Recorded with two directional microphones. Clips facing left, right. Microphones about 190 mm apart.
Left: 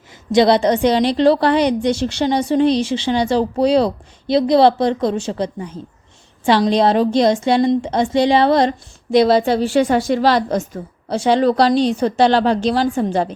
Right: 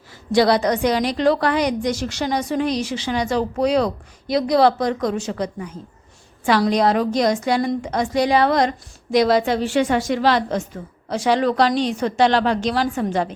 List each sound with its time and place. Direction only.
0.3 s a woman's voice: 25° left (ahead or behind)